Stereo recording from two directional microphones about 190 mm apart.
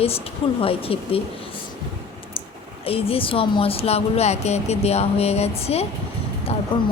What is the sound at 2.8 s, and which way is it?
A woman's voice, 30° left (ahead or behind).